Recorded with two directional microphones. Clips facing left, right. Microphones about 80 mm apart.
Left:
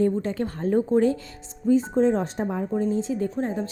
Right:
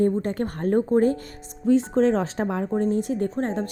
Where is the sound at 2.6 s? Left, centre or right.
Right.